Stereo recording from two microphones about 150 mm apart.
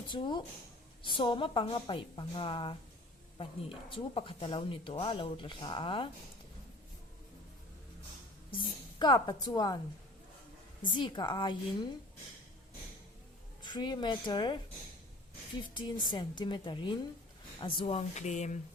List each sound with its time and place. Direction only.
0.1 s speech: 30° left (ahead or behind)
8.4 s a woman's voice: 30° left (ahead or behind)
10.8 s speech: 30° left (ahead or behind)
13.6 s a woman's voice: 30° left (ahead or behind)
15.7 s speech: 30° left (ahead or behind); by 18.6 s 50° left (ahead or behind)